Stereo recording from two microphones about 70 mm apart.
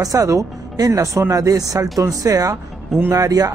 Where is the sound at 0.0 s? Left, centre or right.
Right.